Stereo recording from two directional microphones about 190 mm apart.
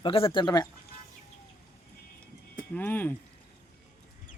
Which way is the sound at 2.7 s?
10° left (ahead or behind).